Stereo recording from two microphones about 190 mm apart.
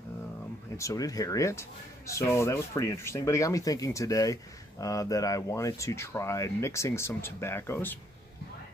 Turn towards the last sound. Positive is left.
turn(degrees=10)  # may be behind; listen again after turning